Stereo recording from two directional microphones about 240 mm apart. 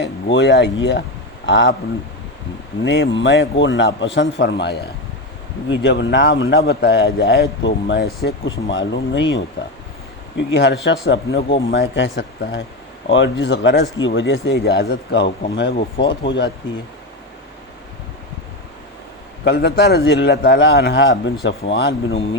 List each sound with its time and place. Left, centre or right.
0.0 s speech: left
2.8 s speech: left
19.5 s speech: left